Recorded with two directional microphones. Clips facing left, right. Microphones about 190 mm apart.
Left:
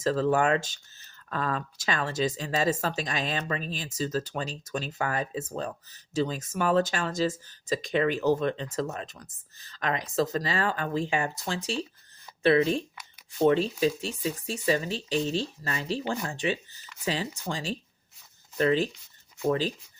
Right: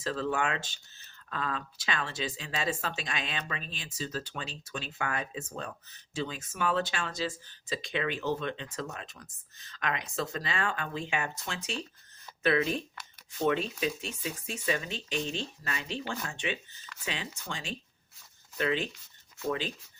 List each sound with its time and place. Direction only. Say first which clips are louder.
0.0 s speech: left 7 dB; 40° left (ahead or behind)